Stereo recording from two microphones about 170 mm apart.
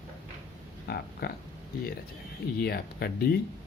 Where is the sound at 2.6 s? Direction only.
65° left (ahead or behind).